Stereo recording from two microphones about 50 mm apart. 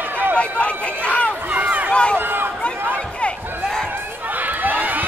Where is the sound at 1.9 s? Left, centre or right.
Left.